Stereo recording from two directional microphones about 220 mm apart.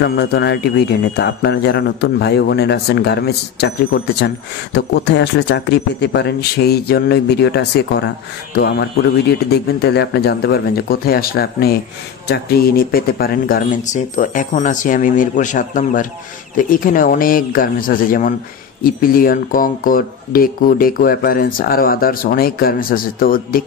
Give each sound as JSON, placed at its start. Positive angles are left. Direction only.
{"t": 0.0, "sound": "a man's voice", "side_deg": 50}